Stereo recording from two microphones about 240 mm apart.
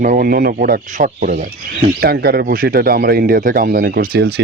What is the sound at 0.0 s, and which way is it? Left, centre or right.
Speech, right.